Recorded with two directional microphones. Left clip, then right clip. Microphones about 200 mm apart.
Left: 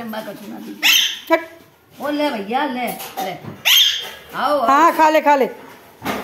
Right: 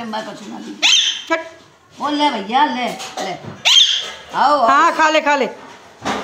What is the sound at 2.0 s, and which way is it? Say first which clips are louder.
Speech: right 3 dB; 25° left (ahead or behind).